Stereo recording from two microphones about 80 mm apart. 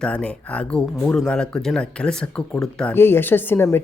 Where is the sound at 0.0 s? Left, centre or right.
Centre.